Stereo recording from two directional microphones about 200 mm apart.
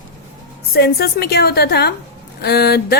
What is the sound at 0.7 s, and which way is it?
A woman's voice, 50° left (ahead or behind).